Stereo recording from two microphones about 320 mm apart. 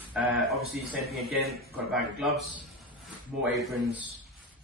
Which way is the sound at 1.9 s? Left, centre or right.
Centre.